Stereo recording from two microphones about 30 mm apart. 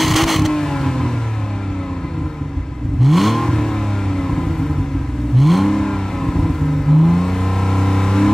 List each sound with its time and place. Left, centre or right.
0.0 s vehicle: centre
0.5 s vehicle: centre
3.0 s vehicle: centre
3.4 s vehicle: centre
5.4 s vehicle: centre
5.7 s vehicle: centre